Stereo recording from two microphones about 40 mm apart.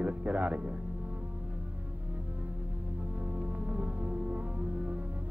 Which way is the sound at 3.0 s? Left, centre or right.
Right.